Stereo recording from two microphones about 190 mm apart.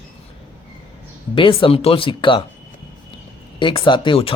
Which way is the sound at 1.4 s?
25° left (ahead or behind).